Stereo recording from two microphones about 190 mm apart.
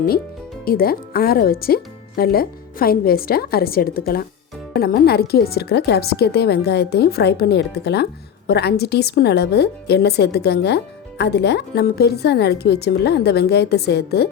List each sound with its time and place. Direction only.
0.6 s a woman's voice: 50° left (ahead or behind)